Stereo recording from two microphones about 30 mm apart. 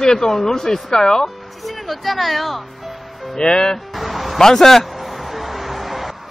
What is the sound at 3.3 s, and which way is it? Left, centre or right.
Speech, left.